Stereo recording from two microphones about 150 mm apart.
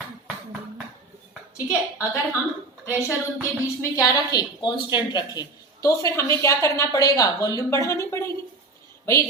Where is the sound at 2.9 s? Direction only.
10° right (ahead or behind).